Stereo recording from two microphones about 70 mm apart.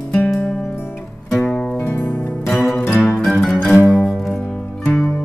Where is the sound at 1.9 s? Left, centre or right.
Left.